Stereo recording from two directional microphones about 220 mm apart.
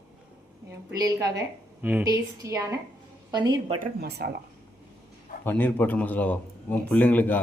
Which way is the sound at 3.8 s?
45° right (ahead or behind).